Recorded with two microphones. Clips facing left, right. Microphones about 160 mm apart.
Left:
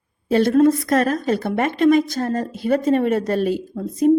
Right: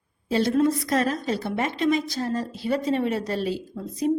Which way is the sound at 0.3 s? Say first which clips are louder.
Left 6 dB; 55° left (ahead or behind).